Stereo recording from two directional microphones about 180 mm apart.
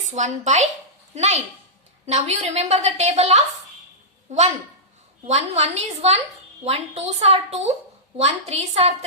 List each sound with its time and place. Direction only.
0.1 s a woman's voice: 40° right (ahead or behind)
5.2 s a woman's voice: 40° right (ahead or behind)